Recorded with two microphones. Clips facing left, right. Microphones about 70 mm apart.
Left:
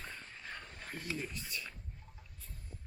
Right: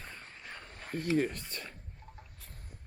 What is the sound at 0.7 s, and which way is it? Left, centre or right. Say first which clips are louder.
Speech: right 13 dB; right.